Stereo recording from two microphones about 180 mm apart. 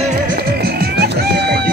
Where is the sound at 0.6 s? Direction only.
60° right (ahead or behind).